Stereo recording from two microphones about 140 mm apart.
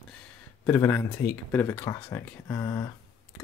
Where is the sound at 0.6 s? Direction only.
15° left (ahead or behind).